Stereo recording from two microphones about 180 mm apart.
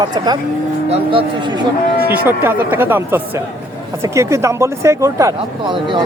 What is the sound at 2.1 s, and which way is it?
Speech, 10° right (ahead or behind).